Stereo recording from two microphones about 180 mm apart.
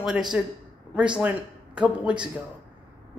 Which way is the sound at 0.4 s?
5° right (ahead or behind).